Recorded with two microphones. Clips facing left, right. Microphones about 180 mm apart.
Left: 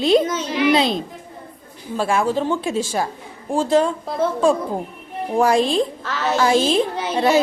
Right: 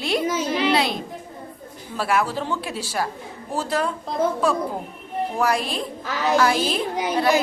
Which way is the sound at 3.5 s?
25° left (ahead or behind).